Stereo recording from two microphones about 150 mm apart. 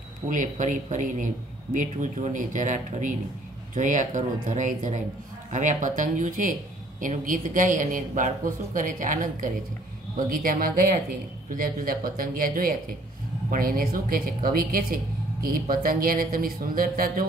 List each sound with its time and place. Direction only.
0.3 s speech: 60° right (ahead or behind)